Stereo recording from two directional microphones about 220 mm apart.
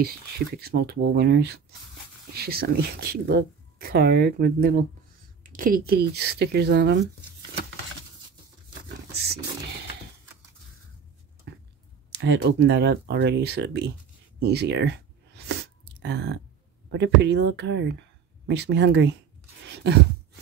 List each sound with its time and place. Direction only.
0.6 s speech: 45° right (ahead or behind)
8.8 s patter: 45° right (ahead or behind)
11.5 s a sound: 50° right (ahead or behind)
12.1 s speech: 50° right (ahead or behind)
14.5 s a sound: 50° right (ahead or behind)
16.9 s speech: 50° right (ahead or behind)